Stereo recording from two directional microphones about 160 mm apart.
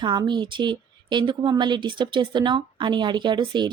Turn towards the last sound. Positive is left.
turn(degrees=-30)  # may be behind; listen again after turning